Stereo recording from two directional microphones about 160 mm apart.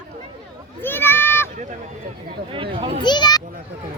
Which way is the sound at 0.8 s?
15° left (ahead or behind).